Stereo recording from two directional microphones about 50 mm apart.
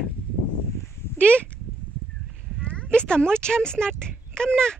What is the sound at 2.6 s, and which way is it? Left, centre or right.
Speech, left.